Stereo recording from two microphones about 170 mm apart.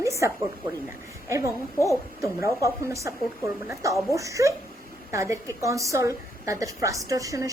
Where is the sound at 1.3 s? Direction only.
15° right (ahead or behind).